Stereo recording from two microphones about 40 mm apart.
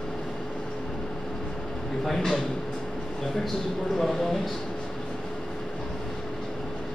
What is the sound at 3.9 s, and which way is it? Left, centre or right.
Speech, centre.